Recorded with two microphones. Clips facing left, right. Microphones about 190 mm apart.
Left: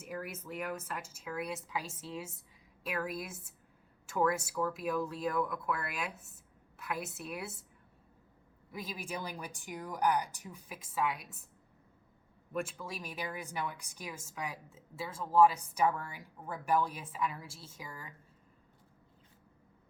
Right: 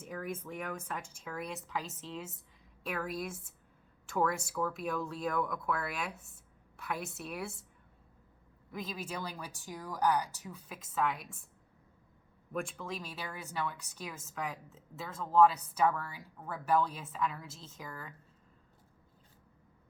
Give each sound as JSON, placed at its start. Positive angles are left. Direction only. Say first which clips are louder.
{"t": 0.0, "sound": "speech", "louder": "right 2 dB", "side_deg": 5}
{"t": 8.7, "sound": "speech", "louder": "right 1 dB", "side_deg": 10}
{"t": 12.5, "sound": "speech", "louder": "even", "side_deg": 5}